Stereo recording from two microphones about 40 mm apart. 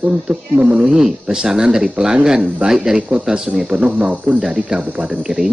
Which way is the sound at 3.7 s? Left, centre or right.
Right.